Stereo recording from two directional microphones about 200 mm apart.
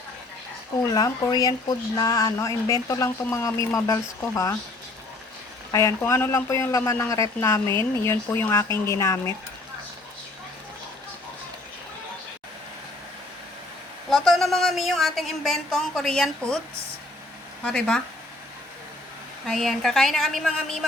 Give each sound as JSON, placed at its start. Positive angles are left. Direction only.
{"t": 0.8, "sound": "a man's voice", "side_deg": 15}
{"t": 5.7, "sound": "a man's voice", "side_deg": 15}
{"t": 14.1, "sound": "a woman's voice", "side_deg": 0}
{"t": 17.6, "sound": "a woman's voice", "side_deg": 5}
{"t": 19.5, "sound": "a woman's voice", "side_deg": 0}